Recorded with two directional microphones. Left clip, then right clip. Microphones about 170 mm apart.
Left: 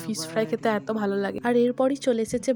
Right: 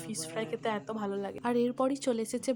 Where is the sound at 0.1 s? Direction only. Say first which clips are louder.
Left 10 dB; 30° left (ahead or behind).